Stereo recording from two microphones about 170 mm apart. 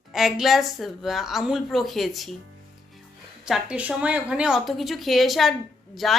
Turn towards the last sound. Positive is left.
turn(degrees=0)  # may be behind; listen again after turning